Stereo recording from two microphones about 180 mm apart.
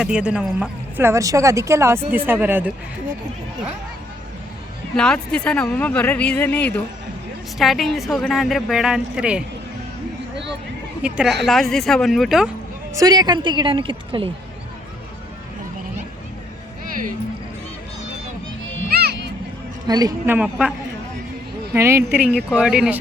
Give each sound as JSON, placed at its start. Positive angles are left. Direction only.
{"t": 0.0, "sound": "speech", "side_deg": -5}
{"t": 4.9, "sound": "a woman's voice", "side_deg": 5}
{"t": 11.0, "sound": "a woman's voice", "side_deg": -5}
{"t": 12.9, "sound": "a woman's voice", "side_deg": -20}
{"t": 18.9, "sound": "a sound", "side_deg": -60}
{"t": 19.9, "sound": "a woman's voice", "side_deg": -20}
{"t": 20.3, "sound": "speech", "side_deg": -5}